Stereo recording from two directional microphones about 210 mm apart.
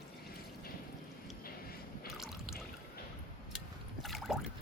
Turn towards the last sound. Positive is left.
turn(degrees=0)  # may be behind; listen again after turning